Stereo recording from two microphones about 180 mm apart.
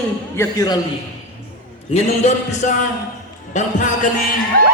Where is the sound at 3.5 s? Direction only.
45° left (ahead or behind).